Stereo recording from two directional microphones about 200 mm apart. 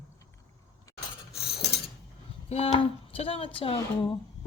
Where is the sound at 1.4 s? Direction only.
55° left (ahead or behind).